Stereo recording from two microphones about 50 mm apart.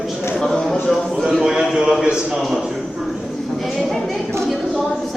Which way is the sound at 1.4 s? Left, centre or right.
Centre.